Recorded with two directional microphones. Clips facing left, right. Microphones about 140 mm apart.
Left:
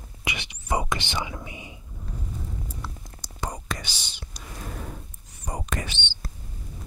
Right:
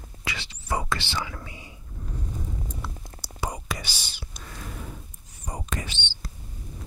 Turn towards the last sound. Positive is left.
turn(degrees=60)  # may be behind; listen again after turning